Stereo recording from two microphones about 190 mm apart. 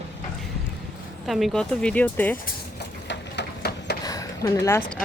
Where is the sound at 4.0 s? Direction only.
20° left (ahead or behind).